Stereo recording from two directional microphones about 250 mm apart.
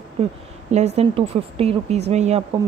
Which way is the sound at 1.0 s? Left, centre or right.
Right.